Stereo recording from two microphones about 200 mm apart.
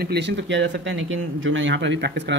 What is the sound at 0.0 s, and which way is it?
Speech, 55° right (ahead or behind).